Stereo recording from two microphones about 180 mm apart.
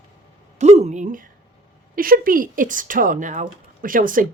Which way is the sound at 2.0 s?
50° right (ahead or behind).